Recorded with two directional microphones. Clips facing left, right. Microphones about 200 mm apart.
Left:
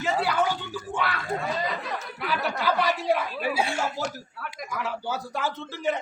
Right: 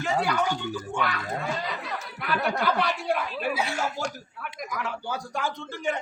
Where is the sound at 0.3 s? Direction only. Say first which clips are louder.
Left 1 dB; 5° left (ahead or behind).